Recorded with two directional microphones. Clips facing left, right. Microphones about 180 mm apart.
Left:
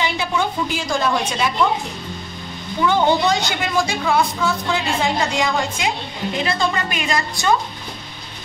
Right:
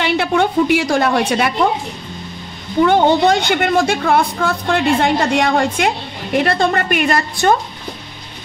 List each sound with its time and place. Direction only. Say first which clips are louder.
0.0 s a woman's voice: right 6 dB; 65° right (ahead or behind)
2.8 s a woman's voice: right 5 dB; 55° right (ahead or behind)